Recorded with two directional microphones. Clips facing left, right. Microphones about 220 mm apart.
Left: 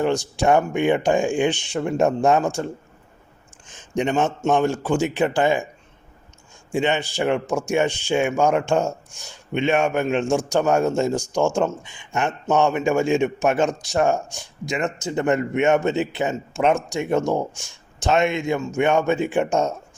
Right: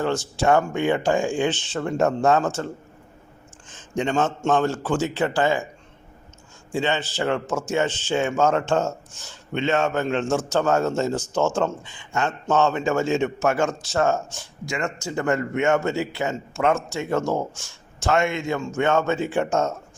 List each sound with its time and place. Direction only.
0.0 s a man's voice: 15° left (ahead or behind)
3.7 s a man's voice: 15° left (ahead or behind)
6.7 s a man's voice: 15° left (ahead or behind)